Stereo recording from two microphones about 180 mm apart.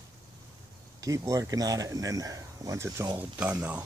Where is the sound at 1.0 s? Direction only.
20° right (ahead or behind).